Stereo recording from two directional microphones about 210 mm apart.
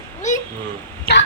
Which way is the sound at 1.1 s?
50° left (ahead or behind).